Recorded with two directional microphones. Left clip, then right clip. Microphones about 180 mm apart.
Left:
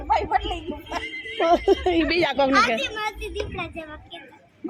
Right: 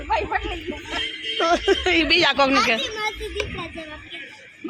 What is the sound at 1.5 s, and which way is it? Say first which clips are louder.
Speech: even; 20° left (ahead or behind).